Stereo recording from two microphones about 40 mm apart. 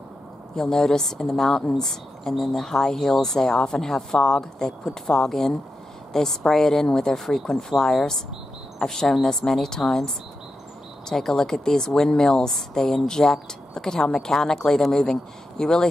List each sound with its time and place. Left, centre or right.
0.6 s speech: centre